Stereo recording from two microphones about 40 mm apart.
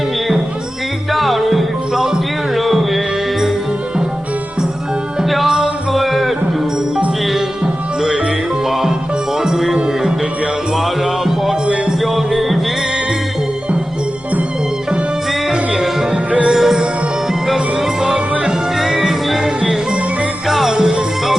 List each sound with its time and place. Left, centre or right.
1.1 s music: centre
5.5 s music: centre
5.9 s music: centre
9.4 s music: centre
11.0 s music: centre
15.4 s music: centre
18.0 s music: centre
20.5 s music: centre
20.7 s music: right